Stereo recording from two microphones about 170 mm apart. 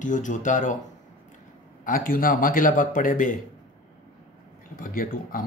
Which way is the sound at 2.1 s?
55° left (ahead or behind).